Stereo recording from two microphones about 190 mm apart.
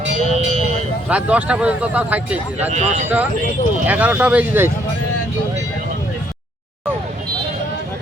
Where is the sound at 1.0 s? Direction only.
5° right (ahead or behind).